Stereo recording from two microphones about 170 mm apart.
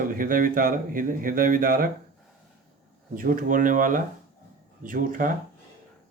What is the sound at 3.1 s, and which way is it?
Speech, 55° right (ahead or behind).